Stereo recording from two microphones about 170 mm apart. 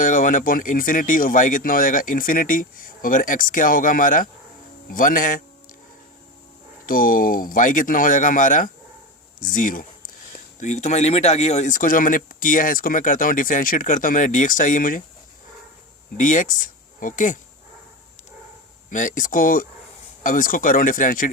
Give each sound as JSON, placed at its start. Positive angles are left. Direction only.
{"t": 0.0, "sound": "speech", "side_deg": 50}
{"t": 6.8, "sound": "speech", "side_deg": 55}
{"t": 16.1, "sound": "speech", "side_deg": 50}
{"t": 18.9, "sound": "speech", "side_deg": 50}